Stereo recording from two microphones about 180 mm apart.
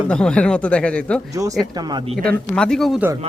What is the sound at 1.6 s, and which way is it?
Speech, 20° right (ahead or behind).